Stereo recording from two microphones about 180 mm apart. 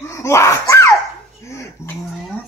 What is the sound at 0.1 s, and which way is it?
Screaming, 15° left (ahead or behind).